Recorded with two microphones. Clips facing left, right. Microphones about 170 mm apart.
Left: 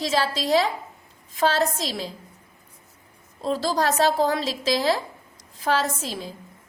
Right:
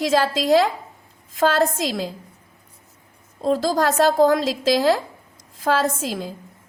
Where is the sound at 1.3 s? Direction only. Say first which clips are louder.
Right 3 dB; 50° right (ahead or behind).